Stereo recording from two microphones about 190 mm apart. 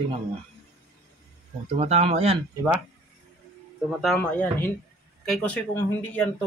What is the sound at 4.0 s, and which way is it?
Speech, 5° left (ahead or behind).